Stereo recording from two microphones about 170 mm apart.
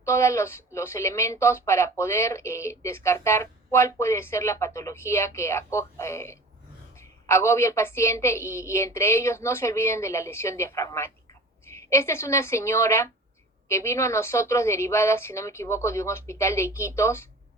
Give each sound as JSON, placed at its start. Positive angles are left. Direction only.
{"t": 0.0, "sound": "a woman's voice", "side_deg": 15}